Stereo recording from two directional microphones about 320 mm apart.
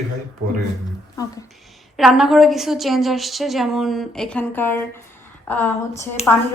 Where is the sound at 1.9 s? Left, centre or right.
Centre.